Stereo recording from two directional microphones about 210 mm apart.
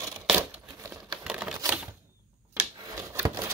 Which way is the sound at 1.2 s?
5° right (ahead or behind).